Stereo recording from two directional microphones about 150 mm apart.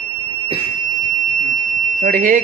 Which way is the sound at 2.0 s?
70° right (ahead or behind).